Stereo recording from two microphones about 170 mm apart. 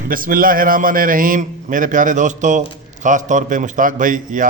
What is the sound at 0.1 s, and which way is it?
A man's voice, 55° right (ahead or behind).